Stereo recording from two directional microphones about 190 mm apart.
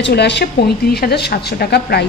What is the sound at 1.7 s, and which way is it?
Speech, 60° left (ahead or behind).